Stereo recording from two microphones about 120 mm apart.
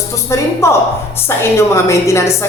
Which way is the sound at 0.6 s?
20° left (ahead or behind).